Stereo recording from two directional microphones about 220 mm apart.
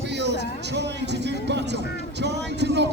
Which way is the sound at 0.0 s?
50° right (ahead or behind).